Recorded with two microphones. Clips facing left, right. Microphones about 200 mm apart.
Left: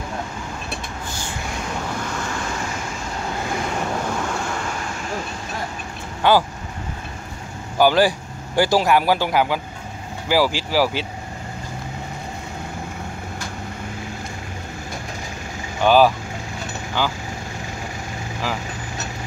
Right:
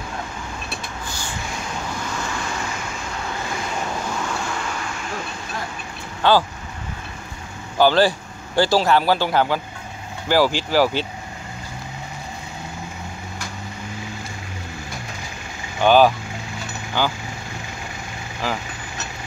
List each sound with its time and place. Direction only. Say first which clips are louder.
6.2 s speech: even; 15° left (ahead or behind)
7.7 s speech: even; 10° left (ahead or behind)
15.8 s speech: even; 5° left (ahead or behind)